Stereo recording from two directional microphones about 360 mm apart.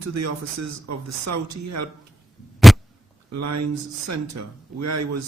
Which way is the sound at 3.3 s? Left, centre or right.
Right.